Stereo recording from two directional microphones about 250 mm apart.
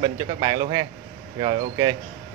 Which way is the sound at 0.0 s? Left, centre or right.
Centre.